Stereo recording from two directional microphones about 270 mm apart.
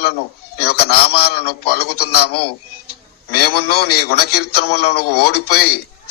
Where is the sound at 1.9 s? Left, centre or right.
Left.